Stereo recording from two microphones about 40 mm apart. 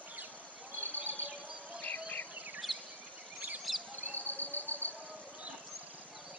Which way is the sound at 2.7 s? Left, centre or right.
Centre.